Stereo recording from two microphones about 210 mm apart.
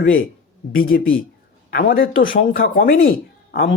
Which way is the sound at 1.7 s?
45° left (ahead or behind).